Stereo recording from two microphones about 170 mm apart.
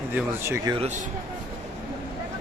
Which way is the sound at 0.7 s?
40° right (ahead or behind).